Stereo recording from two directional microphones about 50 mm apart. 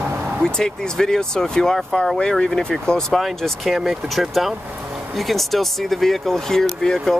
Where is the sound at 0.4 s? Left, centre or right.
Centre.